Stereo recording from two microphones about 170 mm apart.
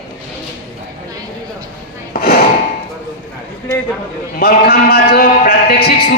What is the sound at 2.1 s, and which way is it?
Drawer open or close, 65° left (ahead or behind).